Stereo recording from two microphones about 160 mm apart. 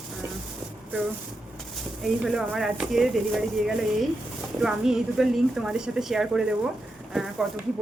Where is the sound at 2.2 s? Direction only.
Centre (ahead or behind).